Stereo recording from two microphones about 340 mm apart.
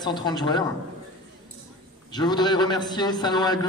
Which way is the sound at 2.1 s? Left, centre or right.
Centre.